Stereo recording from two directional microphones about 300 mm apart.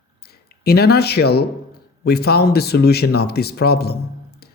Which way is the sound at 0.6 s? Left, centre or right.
Left.